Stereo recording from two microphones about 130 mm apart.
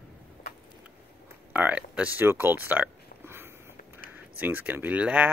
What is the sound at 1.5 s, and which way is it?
Speech, 10° right (ahead or behind).